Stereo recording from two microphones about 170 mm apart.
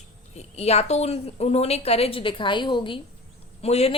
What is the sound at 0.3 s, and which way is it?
A woman's voice, 40° left (ahead or behind).